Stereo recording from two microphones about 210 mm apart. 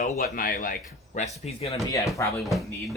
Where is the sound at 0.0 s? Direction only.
40° left (ahead or behind).